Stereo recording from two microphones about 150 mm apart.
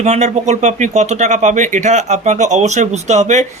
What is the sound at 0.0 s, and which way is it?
Speech, 50° right (ahead or behind).